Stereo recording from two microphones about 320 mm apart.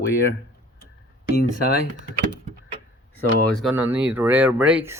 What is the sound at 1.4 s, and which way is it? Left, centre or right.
Speech, left.